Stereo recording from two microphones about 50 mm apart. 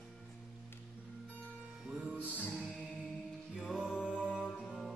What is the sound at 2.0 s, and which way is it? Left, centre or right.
Music, right.